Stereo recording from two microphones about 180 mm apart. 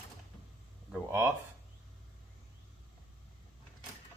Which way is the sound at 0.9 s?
5° right (ahead or behind).